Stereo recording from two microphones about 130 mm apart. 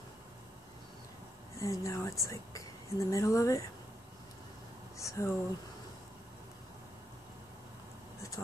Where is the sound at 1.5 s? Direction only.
25° left (ahead or behind).